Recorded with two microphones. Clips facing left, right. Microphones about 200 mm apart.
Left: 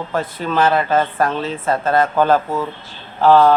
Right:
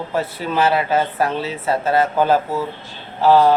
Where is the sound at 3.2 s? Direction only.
50° left (ahead or behind).